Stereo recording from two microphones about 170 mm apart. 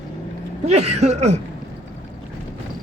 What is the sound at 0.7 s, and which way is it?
Speech, 40° right (ahead or behind).